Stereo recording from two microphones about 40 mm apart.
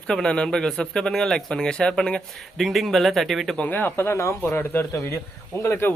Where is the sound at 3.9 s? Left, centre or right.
Left.